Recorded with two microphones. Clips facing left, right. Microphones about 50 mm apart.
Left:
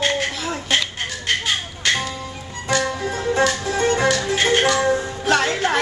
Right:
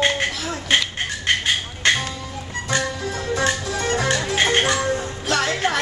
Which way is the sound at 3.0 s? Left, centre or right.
Left.